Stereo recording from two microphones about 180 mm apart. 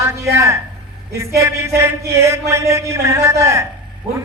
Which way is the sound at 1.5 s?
15° right (ahead or behind).